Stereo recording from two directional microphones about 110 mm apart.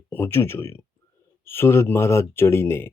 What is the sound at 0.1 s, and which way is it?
Speech, 20° left (ahead or behind).